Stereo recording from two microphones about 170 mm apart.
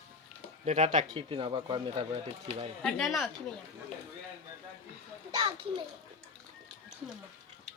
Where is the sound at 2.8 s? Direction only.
Centre (ahead or behind).